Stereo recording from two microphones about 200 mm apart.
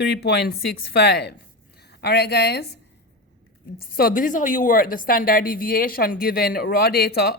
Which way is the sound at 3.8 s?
50° left (ahead or behind).